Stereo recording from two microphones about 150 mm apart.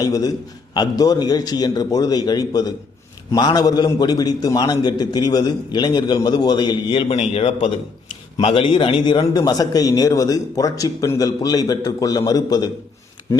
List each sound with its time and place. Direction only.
0.0 s a man's voice: 25° left (ahead or behind)
7.1 s a man's voice: 45° left (ahead or behind); by 12.7 s 25° left (ahead or behind)